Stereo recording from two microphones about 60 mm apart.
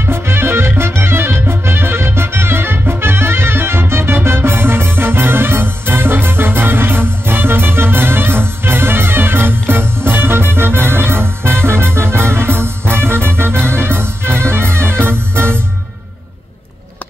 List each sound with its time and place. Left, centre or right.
0.0 s music: right